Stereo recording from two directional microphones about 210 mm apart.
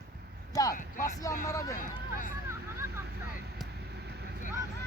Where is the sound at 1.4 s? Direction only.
15° left (ahead or behind).